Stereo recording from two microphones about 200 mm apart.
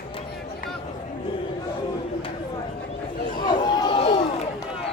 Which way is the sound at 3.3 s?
20° left (ahead or behind).